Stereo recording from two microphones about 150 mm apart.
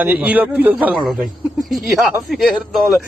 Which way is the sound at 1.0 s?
Centre (ahead or behind).